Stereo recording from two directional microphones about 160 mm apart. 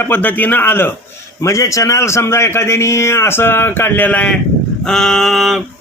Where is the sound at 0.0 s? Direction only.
10° left (ahead or behind).